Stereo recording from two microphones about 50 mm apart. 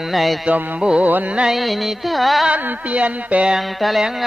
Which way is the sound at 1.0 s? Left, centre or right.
Right.